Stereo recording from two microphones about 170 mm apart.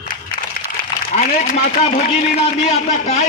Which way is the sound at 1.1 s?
40° left (ahead or behind).